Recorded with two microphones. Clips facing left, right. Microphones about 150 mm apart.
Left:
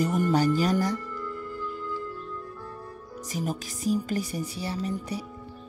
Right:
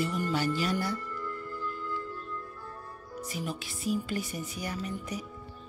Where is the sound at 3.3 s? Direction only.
40° left (ahead or behind).